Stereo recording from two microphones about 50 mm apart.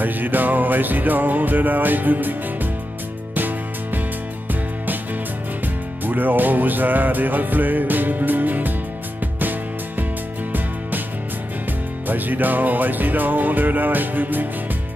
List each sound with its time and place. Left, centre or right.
0.0 s music: right
6.0 s music: right
12.1 s music: right